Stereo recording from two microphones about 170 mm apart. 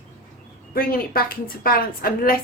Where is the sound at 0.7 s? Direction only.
60° left (ahead or behind).